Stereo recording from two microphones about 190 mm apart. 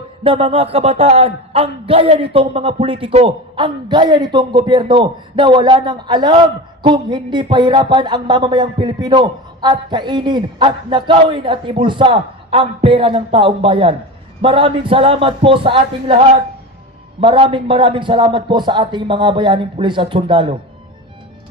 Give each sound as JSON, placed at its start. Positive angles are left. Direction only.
{"t": 0.2, "sound": "a man's voice", "side_deg": -30}
{"t": 17.2, "sound": "a man's voice", "side_deg": -30}